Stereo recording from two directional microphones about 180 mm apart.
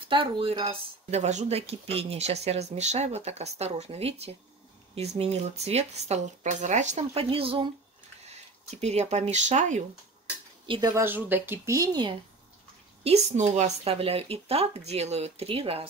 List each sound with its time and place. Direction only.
0.1 s speech: 30° right (ahead or behind)
10.7 s speech: 20° right (ahead or behind)
11.1 s speech: 10° right (ahead or behind)
13.0 s speech: 35° right (ahead or behind)